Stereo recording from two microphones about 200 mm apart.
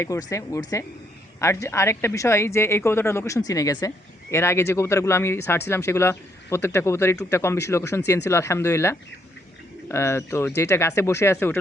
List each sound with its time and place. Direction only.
0.0 s a woman's voice: 15° left (ahead or behind)